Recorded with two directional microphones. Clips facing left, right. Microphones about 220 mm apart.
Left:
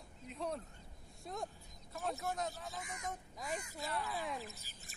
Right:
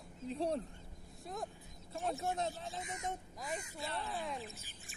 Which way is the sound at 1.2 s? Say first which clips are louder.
Even; centre (ahead or behind).